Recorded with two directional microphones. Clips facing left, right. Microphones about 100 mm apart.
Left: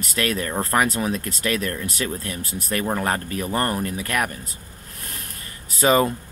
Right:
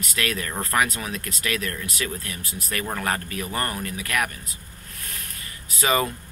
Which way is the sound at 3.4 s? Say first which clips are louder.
Left 8 dB; 35° left (ahead or behind).